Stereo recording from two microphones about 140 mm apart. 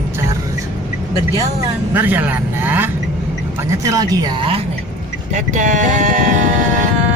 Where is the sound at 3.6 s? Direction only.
25° right (ahead or behind).